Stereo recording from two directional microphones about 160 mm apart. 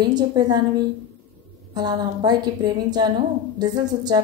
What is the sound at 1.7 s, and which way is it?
A woman's voice, 25° right (ahead or behind).